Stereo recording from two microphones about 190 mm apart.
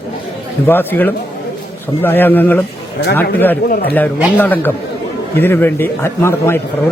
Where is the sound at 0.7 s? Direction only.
10° left (ahead or behind).